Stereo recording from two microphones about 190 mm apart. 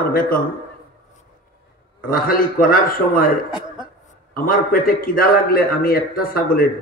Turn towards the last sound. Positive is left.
turn(degrees=50)  # may be behind; listen again after turning